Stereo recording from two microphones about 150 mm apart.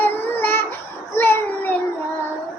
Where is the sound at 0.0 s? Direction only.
15° left (ahead or behind).